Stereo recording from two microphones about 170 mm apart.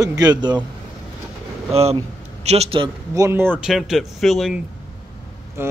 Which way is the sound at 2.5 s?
35° right (ahead or behind).